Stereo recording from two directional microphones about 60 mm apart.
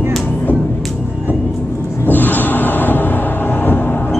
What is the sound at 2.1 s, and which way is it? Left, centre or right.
Music, left.